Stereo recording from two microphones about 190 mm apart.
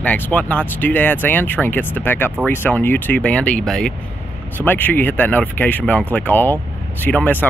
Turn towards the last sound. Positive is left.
turn(degrees=10)  # may be behind; listen again after turning